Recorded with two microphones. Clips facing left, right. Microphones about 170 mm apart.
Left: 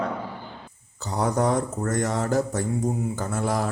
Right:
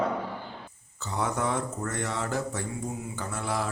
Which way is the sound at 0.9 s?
35° left (ahead or behind).